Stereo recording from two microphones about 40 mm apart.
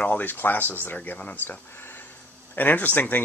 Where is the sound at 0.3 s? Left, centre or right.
Left.